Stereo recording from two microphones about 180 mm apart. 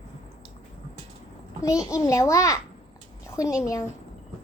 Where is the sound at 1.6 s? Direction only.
15° left (ahead or behind).